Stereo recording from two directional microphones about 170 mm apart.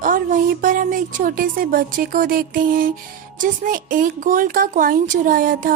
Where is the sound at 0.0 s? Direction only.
50° right (ahead or behind).